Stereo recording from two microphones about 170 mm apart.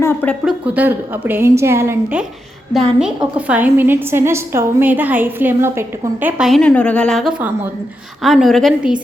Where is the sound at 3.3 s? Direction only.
10° right (ahead or behind).